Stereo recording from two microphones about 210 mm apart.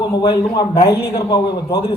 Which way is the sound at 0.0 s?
20° left (ahead or behind).